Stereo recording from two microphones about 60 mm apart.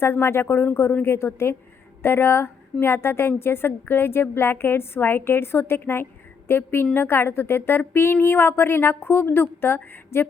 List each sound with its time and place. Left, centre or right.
0.0 s a woman's voice: left